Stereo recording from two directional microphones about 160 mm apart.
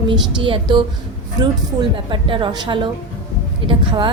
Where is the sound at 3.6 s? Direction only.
30° right (ahead or behind).